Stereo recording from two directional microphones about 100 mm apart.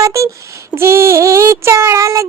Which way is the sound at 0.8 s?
25° right (ahead or behind).